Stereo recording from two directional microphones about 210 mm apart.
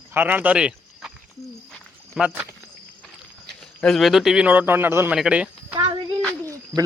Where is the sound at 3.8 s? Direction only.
Centre (ahead or behind).